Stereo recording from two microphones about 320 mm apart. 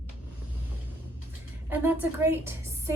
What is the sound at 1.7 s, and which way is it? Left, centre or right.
A woman's voice, centre.